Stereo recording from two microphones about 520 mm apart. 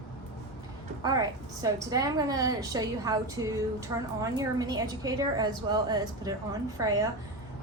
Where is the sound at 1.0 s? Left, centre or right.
Centre.